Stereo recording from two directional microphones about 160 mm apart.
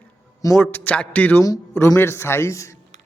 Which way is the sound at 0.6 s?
10° left (ahead or behind).